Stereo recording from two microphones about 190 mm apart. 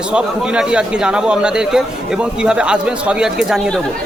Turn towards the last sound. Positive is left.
turn(degrees=-5)  # may be behind; listen again after turning